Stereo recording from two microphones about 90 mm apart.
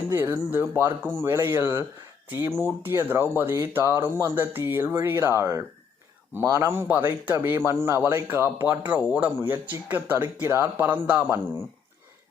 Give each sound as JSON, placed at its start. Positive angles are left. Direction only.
{"t": 0.1, "sound": "speech", "side_deg": -25}